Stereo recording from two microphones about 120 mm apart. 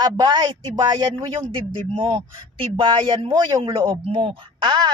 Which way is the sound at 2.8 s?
45° right (ahead or behind).